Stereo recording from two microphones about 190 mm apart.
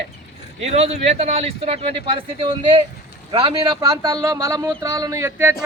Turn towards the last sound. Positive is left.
turn(degrees=-15)  # may be behind; listen again after turning